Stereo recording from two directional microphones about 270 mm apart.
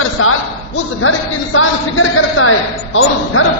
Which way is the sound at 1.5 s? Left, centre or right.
Left.